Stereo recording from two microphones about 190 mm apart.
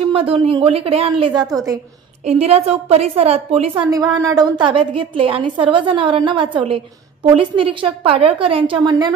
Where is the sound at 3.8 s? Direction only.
20° right (ahead or behind).